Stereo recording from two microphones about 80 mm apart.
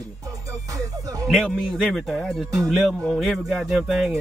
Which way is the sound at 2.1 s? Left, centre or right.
Centre.